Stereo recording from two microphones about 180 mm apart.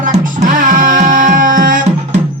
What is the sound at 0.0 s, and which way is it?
Music, 50° right (ahead or behind).